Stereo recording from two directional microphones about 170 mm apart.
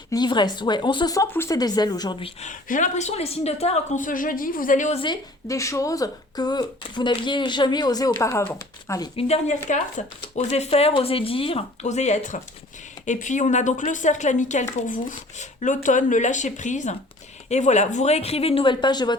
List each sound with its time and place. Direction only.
0.1 s a woman's voice: 25° left (ahead or behind)
2.5 s a woman's voice: 50° left (ahead or behind)
5.5 s a woman's voice: 20° left (ahead or behind)
9.1 s a woman's voice: 40° left (ahead or behind)